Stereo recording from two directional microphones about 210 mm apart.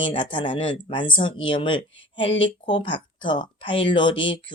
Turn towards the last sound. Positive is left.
turn(degrees=25)  # may be behind; listen again after turning